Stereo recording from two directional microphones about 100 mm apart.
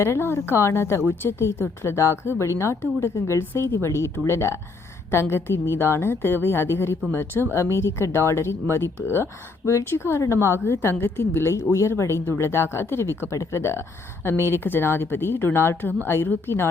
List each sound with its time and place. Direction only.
0.0 s speech: 25° left (ahead or behind)